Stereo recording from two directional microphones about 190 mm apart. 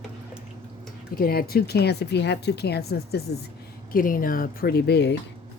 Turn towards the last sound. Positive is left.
turn(degrees=60)  # may be behind; listen again after turning